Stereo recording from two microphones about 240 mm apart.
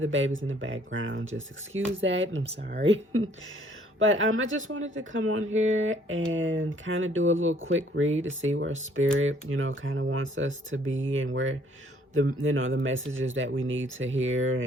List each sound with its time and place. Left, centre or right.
0.0 s speech: right